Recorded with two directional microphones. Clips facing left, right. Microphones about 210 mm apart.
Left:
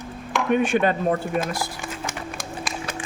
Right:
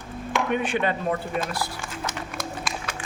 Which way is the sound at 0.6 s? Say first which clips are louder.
Left 4 dB; 45° left (ahead or behind).